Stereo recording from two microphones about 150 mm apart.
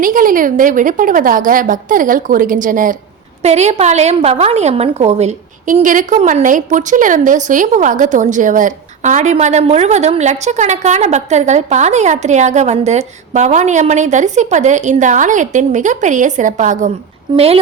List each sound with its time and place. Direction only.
0.0 s a woman's voice: 65° right (ahead or behind)
3.4 s a woman's voice: 45° right (ahead or behind)
17.3 s a woman's voice: 40° right (ahead or behind)